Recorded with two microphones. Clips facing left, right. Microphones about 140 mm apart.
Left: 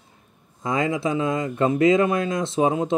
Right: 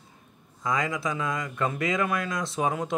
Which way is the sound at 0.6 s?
25° left (ahead or behind).